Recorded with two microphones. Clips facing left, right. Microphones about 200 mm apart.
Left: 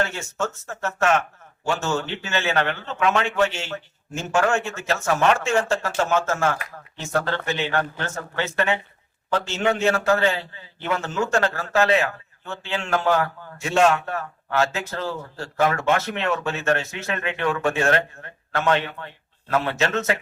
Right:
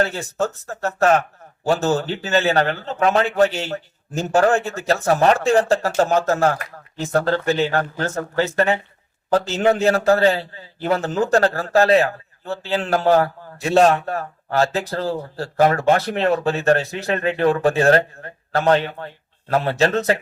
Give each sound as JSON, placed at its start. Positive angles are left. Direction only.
{"t": 0.0, "sound": "a man's voice", "side_deg": -35}